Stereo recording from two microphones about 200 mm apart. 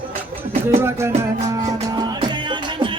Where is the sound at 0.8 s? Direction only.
10° right (ahead or behind).